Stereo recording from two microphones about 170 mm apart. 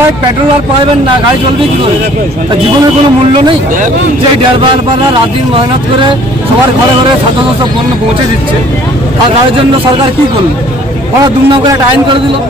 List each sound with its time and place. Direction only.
11.1 s a man's voice: 20° right (ahead or behind)